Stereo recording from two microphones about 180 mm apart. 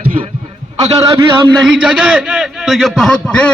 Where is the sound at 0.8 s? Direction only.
20° right (ahead or behind).